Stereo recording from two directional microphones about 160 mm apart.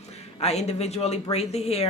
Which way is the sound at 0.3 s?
40° left (ahead or behind).